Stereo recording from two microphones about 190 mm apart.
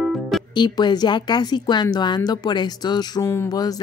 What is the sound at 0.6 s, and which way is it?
Speech, 20° left (ahead or behind).